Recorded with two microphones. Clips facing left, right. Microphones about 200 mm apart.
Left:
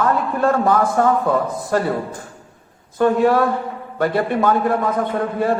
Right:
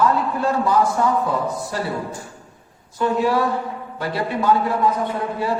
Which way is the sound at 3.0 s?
55° left (ahead or behind).